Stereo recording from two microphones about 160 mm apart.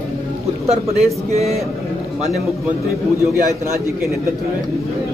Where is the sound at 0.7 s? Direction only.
40° right (ahead or behind).